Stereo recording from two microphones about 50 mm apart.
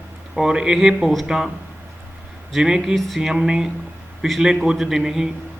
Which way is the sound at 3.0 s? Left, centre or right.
Centre.